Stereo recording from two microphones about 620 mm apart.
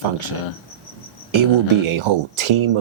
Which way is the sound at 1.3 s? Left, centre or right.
Right.